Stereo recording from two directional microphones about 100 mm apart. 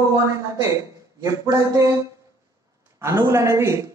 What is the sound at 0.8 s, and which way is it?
Speech, 35° right (ahead or behind).